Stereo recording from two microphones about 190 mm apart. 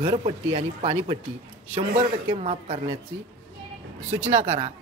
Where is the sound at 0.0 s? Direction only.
30° right (ahead or behind).